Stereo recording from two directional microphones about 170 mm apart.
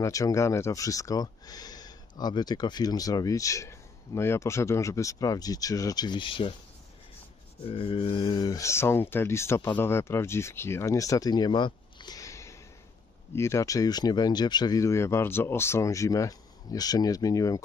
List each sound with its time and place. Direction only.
0.0 s speech: 20° left (ahead or behind)
7.6 s speech: 35° left (ahead or behind)